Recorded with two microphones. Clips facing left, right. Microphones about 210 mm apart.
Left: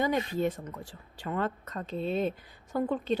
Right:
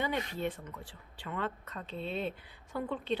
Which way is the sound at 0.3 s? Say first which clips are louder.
Left 6 dB; 40° left (ahead or behind).